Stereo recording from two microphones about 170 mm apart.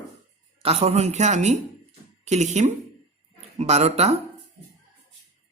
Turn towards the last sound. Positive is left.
turn(degrees=-40)  # may be behind; listen again after turning